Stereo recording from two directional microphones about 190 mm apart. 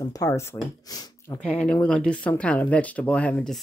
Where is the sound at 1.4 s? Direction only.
5° left (ahead or behind).